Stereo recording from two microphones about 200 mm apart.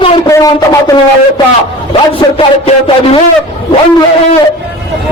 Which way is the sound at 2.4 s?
30° left (ahead or behind).